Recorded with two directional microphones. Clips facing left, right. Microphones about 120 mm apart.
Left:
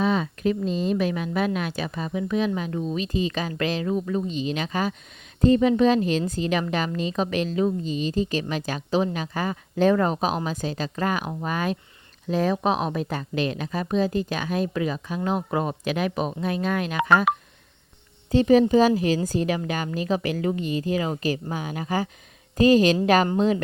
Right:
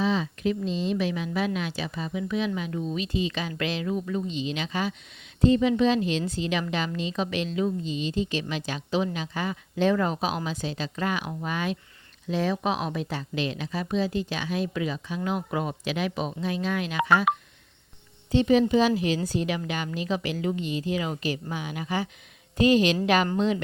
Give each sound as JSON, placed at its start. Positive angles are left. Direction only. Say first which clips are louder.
{"t": 0.0, "sound": "a woman's voice", "louder": "left 3 dB", "side_deg": 50}
{"t": 18.3, "sound": "a woman's voice", "louder": "left 3 dB", "side_deg": 45}